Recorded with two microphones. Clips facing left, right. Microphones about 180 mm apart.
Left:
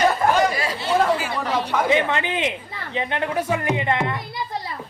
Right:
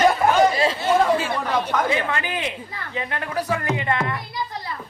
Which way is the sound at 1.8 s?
20° left (ahead or behind).